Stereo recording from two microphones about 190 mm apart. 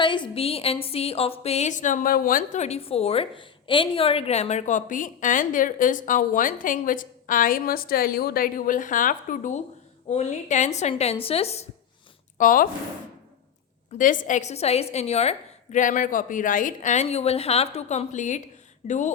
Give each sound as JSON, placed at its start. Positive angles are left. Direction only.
{"t": 0.0, "sound": "a woman's voice", "side_deg": 25}
{"t": 12.4, "sound": "speech", "side_deg": 45}
{"t": 14.0, "sound": "a woman's voice", "side_deg": 45}